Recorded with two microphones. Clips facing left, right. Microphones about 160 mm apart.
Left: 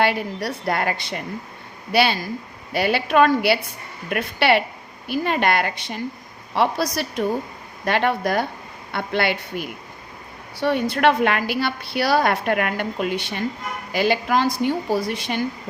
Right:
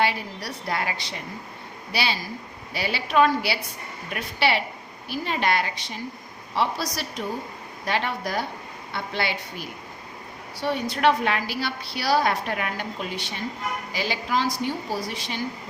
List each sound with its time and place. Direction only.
0.0 s a woman's voice: 55° left (ahead or behind)